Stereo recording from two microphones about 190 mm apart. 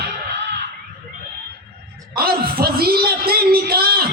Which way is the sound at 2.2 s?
55° right (ahead or behind).